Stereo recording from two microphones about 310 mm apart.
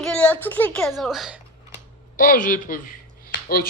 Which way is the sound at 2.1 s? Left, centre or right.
Left.